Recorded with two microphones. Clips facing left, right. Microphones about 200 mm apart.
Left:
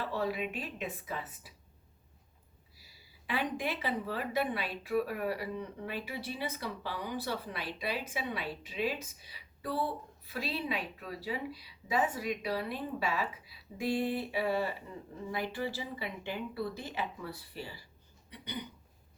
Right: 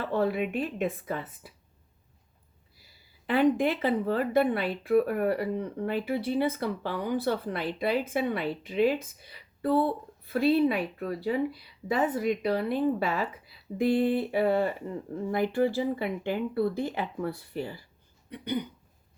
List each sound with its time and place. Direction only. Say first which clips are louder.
0.0 s a woman's voice: right 7 dB; 55° right (ahead or behind)
2.7 s a woman's voice: even; 55° right (ahead or behind)
18.3 s a sound: right 11 dB; 55° right (ahead or behind)